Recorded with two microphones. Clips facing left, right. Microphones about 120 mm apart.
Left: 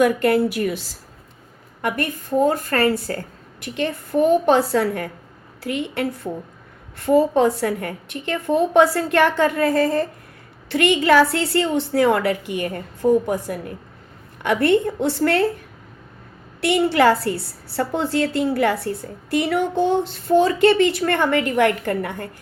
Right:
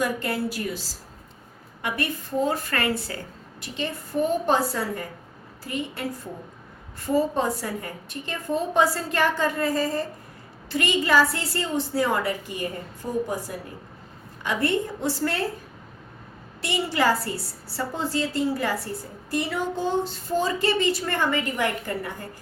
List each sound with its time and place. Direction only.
0.0 s a woman's voice: 60° left (ahead or behind)
1.8 s a woman's voice: 50° left (ahead or behind)
3.6 s a woman's voice: 60° left (ahead or behind)
16.6 s a woman's voice: 60° left (ahead or behind)